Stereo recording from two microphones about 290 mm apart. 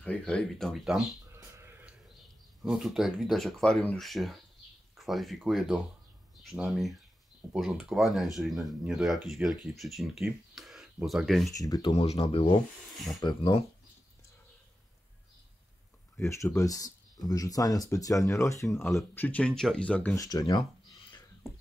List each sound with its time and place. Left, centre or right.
0.0 s speech: centre
11.5 s speech: centre
16.2 s speech: centre
18.7 s speech: centre